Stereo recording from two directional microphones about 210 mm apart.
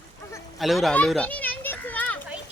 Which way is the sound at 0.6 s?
Centre (ahead or behind).